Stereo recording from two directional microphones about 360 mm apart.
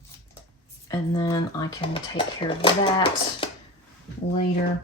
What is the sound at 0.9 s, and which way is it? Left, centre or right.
A woman's voice, centre.